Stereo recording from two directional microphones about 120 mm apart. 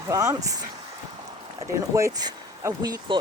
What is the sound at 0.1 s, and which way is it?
Speech, 30° right (ahead or behind).